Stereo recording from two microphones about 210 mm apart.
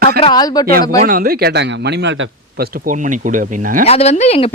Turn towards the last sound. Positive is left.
turn(degrees=30)  # may be behind; listen again after turning